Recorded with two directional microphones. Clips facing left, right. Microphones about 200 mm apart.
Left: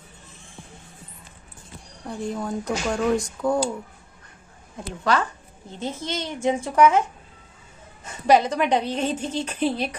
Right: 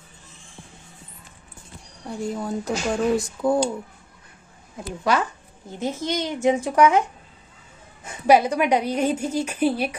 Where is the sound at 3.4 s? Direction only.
25° right (ahead or behind).